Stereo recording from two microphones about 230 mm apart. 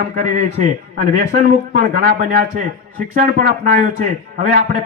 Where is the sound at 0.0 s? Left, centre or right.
Right.